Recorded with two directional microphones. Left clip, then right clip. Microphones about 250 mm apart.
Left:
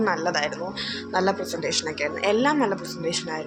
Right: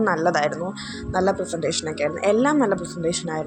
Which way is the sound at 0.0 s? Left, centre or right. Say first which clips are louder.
Right 4 dB; right.